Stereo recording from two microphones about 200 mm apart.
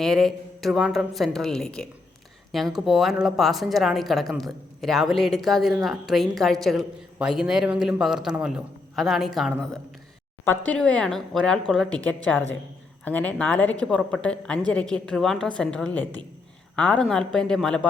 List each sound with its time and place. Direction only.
0.0 s speech: centre (ahead or behind)